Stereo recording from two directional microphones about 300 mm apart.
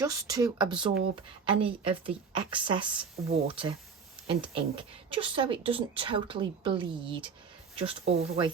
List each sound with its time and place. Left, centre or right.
0.0 s speech: centre